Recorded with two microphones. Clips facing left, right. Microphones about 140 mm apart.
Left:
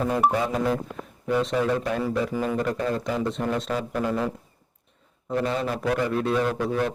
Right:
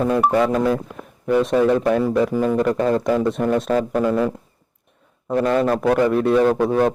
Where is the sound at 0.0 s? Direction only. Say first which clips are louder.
Right 6 dB; 70° right (ahead or behind).